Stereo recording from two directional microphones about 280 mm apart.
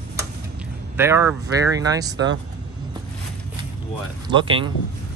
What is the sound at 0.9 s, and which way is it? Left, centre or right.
Speech, centre.